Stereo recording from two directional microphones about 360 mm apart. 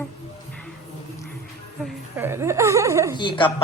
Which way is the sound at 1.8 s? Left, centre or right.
Centre.